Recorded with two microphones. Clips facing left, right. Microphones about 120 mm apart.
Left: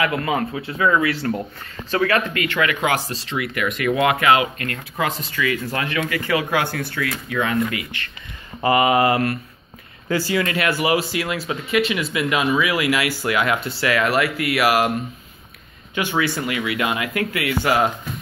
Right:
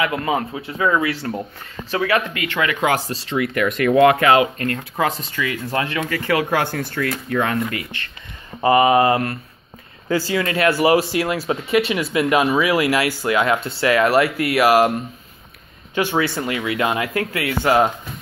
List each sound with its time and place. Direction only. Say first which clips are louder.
0.0 s speech: even; 20° right (ahead or behind); by 7.8 s 40° right (ahead or behind)
8.5 s speech: right 3 dB; 25° right (ahead or behind)
15.9 s speech: right 2 dB; 35° right (ahead or behind)